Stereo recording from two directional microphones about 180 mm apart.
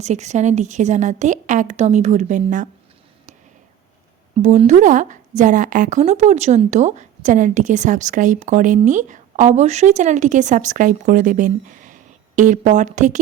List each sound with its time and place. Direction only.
0.0 s a woman's voice: 40° right (ahead or behind)
4.4 s a woman's voice: 40° right (ahead or behind)